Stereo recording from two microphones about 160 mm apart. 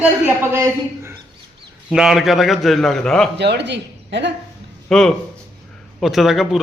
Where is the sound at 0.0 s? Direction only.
15° right (ahead or behind).